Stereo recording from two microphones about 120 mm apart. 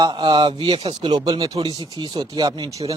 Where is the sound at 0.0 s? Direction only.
40° right (ahead or behind).